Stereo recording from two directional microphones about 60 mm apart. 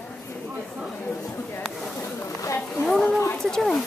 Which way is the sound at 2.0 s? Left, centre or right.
Left.